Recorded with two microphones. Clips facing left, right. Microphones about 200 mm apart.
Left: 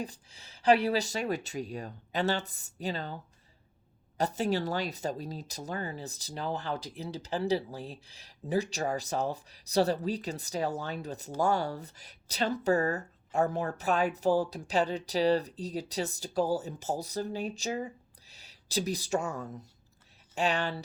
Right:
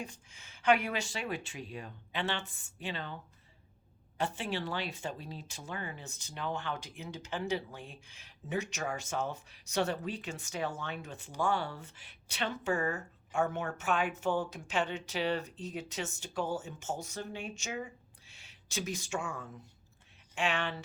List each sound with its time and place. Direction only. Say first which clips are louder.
0.0 s speech: left 5 dB; 35° left (ahead or behind)
4.2 s speech: left 6 dB; 40° left (ahead or behind)